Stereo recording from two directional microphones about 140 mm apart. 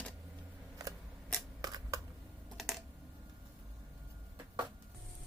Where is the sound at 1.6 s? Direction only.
25° right (ahead or behind).